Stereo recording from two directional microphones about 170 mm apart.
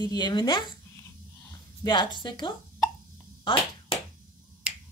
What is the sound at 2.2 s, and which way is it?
A woman's voice, 30° left (ahead or behind).